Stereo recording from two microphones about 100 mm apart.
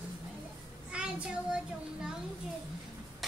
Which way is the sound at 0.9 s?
10° right (ahead or behind).